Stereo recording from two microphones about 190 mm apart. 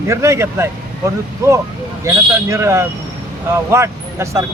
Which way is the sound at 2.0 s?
15° right (ahead or behind).